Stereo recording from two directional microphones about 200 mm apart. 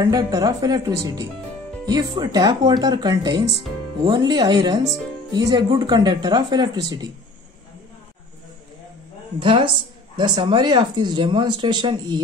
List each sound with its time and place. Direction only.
0.0 s speech: 15° right (ahead or behind)
9.4 s speech: 25° right (ahead or behind)